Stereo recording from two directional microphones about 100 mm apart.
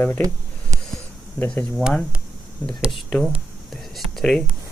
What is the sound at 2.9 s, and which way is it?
Speech, centre (ahead or behind).